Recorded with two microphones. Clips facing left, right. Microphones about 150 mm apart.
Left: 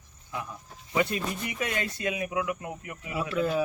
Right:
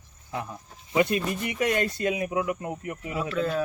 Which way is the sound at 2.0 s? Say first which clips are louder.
Even; 35° right (ahead or behind).